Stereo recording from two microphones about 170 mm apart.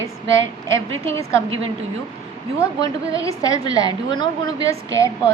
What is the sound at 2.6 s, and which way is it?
A woman's voice, 20° left (ahead or behind).